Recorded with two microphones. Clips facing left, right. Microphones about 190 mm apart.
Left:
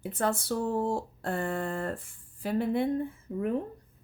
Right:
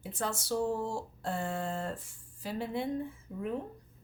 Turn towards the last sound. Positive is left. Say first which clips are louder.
# left 5 dB
turn(degrees=60)  # may be behind; listen again after turning